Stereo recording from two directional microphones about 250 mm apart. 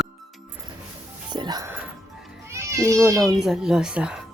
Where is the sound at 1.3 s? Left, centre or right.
Centre.